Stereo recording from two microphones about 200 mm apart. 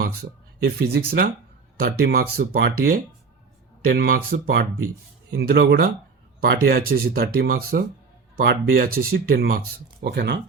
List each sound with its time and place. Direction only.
0.0 s speech: 50° right (ahead or behind)